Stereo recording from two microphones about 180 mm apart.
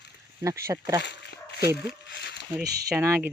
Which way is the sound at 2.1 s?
75° left (ahead or behind).